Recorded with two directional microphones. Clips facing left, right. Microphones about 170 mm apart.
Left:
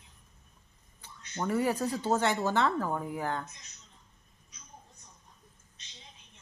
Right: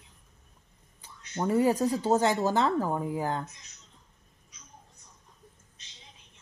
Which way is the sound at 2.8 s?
15° right (ahead or behind).